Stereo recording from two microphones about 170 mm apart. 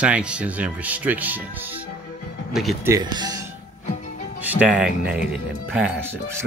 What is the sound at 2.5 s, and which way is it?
Speech, centre (ahead or behind).